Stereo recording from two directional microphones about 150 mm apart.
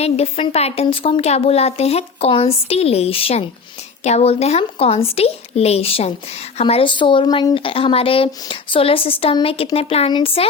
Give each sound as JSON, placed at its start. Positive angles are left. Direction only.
{"t": 0.0, "sound": "a woman's voice", "side_deg": 40}